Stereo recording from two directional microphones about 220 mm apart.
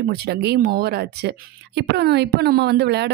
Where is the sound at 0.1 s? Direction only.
45° right (ahead or behind).